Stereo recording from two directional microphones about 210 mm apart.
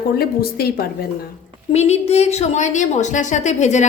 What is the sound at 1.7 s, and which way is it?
A woman's voice, 30° left (ahead or behind).